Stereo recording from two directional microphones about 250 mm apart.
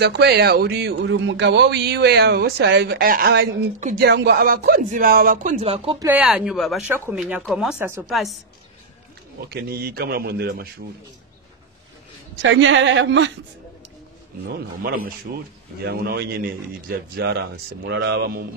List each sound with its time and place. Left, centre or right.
0.0 s speech: right
6.0 s speech: centre
9.5 s speech: right
12.4 s speech: right
14.4 s speech: right